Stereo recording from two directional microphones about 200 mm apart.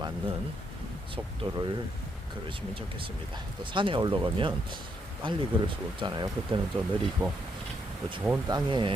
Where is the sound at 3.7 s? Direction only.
25° right (ahead or behind).